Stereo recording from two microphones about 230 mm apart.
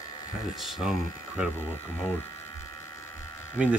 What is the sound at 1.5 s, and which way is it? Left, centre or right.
Speech, centre.